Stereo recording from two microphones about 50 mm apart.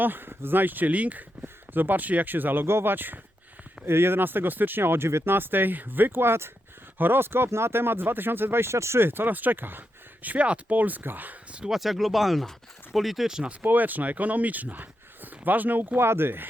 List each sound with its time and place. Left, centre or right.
0.0 s speech: right
2.6 s speech: right
3.8 s speech: right
9.0 s speech: right
10.2 s speech: right
11.7 s speech: centre
13.2 s speech: centre
13.5 s speech: right
16.0 s speech: right